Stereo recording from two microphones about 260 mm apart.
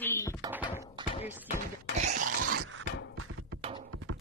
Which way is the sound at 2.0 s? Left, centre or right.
Right.